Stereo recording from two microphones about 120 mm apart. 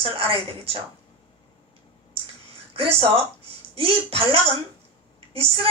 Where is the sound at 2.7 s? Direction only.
50° right (ahead or behind).